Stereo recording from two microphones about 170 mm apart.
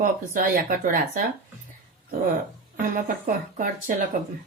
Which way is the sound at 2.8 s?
55° right (ahead or behind).